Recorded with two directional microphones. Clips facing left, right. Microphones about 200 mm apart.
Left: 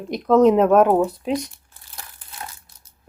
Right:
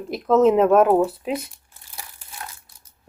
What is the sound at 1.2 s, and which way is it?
Crumpling, 5° right (ahead or behind).